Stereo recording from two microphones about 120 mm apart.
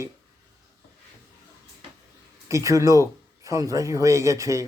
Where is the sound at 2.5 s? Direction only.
25° right (ahead or behind).